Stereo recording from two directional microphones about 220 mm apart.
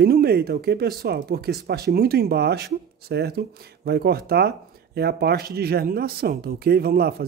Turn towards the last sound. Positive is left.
turn(degrees=-45)  # may be behind; listen again after turning